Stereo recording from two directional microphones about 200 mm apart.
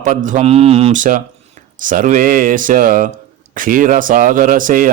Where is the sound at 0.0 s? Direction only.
40° right (ahead or behind).